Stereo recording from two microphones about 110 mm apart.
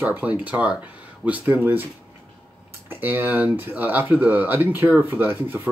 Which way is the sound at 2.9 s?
15° right (ahead or behind).